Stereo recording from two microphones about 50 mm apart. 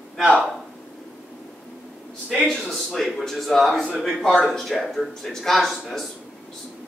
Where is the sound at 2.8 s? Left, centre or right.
Centre.